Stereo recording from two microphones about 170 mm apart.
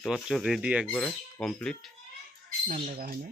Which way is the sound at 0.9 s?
10° left (ahead or behind).